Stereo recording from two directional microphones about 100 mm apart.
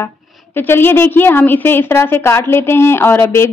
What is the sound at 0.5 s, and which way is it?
A woman's voice, 20° left (ahead or behind).